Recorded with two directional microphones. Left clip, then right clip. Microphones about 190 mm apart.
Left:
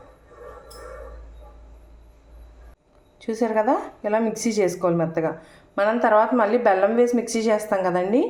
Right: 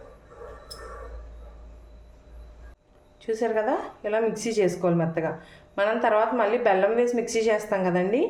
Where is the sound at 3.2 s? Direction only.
20° left (ahead or behind).